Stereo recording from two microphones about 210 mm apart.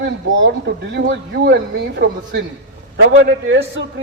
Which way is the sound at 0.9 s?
50° right (ahead or behind).